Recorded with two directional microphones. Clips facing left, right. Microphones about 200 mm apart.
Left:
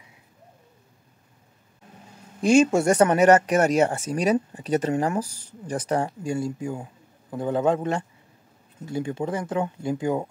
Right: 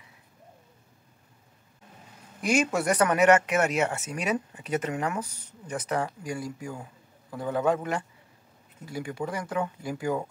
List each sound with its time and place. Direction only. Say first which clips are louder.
2.4 s speech: left 7 dB; 25° left (ahead or behind)